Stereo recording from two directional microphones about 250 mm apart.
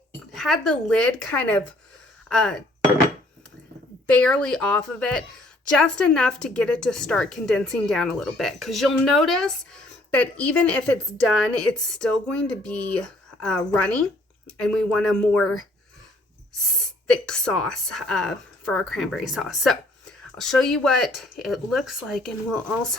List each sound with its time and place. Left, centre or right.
0.3 s a woman's voice: centre
4.0 s a woman's voice: centre
17.1 s a woman's voice: centre